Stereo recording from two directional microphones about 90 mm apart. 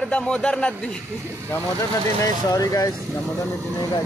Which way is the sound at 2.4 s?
40° left (ahead or behind).